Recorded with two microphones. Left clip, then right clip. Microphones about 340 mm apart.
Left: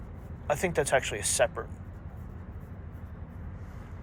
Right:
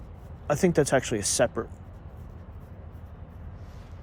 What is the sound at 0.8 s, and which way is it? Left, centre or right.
Speech, right.